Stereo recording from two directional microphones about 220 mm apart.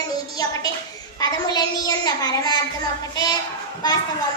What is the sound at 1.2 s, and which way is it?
A child's voice, 15° left (ahead or behind).